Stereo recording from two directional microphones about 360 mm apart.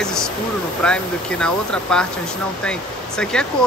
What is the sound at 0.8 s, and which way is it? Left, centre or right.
Speech, centre.